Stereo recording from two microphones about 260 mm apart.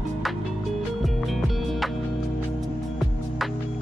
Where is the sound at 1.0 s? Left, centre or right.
Centre.